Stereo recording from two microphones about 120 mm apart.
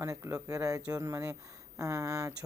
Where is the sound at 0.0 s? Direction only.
25° right (ahead or behind).